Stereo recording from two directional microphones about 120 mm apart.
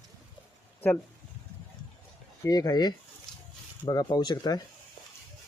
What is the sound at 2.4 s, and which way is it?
Speech, 30° left (ahead or behind).